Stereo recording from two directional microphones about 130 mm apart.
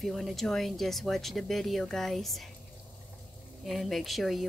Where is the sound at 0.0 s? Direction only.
Centre (ahead or behind).